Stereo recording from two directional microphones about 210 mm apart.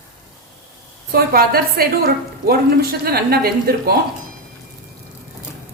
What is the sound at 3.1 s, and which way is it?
Speech, 45° right (ahead or behind).